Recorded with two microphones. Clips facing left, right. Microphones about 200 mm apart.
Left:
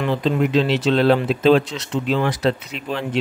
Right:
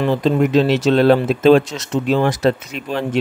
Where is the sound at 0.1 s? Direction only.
45° right (ahead or behind).